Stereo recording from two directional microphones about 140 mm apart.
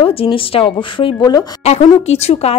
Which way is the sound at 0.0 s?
40° left (ahead or behind).